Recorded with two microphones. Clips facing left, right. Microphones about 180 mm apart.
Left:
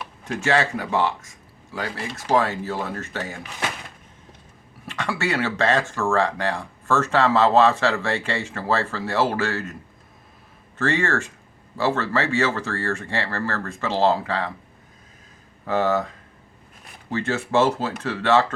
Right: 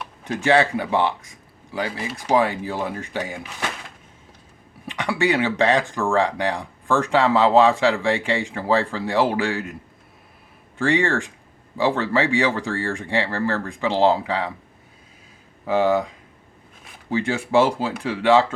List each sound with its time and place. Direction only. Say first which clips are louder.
0.3 s speech: right 4 dB; 15° right (ahead or behind)
4.9 s speech: right 4 dB; 15° right (ahead or behind)
10.8 s speech: right 2 dB; 15° right (ahead or behind)
15.6 s speech: right 3 dB; 10° right (ahead or behind)